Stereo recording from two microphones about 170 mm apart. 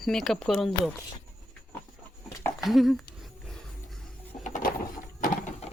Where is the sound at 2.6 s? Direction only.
Centre (ahead or behind).